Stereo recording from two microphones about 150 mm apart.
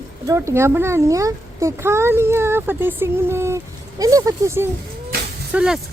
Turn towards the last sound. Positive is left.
turn(degrees=-5)  # may be behind; listen again after turning